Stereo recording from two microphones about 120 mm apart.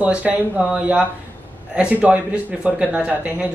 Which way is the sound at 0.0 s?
10° right (ahead or behind).